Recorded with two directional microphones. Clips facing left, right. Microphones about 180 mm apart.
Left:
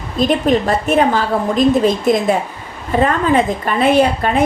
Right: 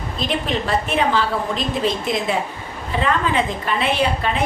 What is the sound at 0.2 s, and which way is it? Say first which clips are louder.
A woman's voice: left 9 dB; 45° left (ahead or behind).